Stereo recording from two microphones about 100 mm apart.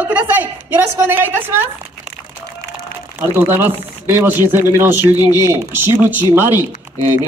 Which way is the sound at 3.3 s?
20° right (ahead or behind).